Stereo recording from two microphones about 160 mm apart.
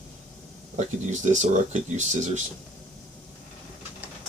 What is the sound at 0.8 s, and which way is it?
Speech, 50° right (ahead or behind).